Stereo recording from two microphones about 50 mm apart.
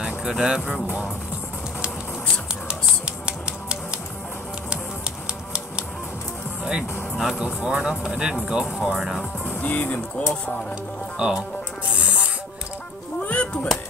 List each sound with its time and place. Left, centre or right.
0.0 s speech: centre
2.7 s music: centre
6.6 s speech: centre
9.4 s speech: left
11.1 s speech: centre
11.9 s music: right
13.2 s music: left